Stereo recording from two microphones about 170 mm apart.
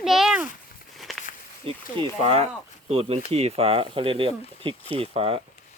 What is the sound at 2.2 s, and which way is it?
Speech, 35° right (ahead or behind).